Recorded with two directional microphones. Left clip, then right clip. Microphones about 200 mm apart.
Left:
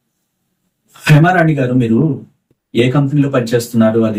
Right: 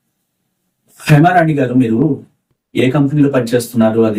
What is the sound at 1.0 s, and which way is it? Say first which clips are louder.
Speech: right 1 dB; 10° right (ahead or behind).